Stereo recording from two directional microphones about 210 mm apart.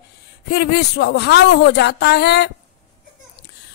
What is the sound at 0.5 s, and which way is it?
A woman's voice, 55° left (ahead or behind).